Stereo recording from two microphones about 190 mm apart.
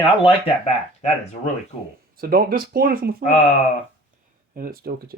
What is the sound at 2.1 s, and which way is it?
Speech, 50° right (ahead or behind).